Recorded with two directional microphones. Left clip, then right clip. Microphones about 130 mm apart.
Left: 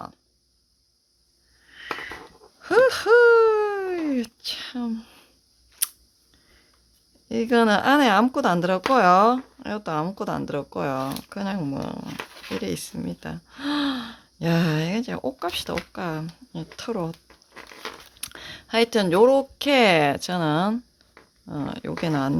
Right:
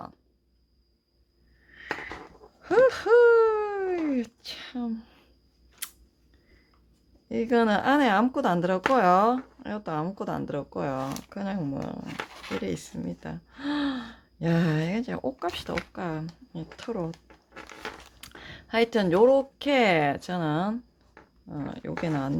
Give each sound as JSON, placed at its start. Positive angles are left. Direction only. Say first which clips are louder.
{"t": 1.7, "sound": "a sound", "louder": "left 3 dB", "side_deg": 30}
{"t": 5.8, "sound": "scissors", "louder": "left 9 dB", "side_deg": 25}
{"t": 7.3, "sound": "speech", "louder": "left 4 dB", "side_deg": 30}
{"t": 18.2, "sound": "speech", "louder": "left 6 dB", "side_deg": 30}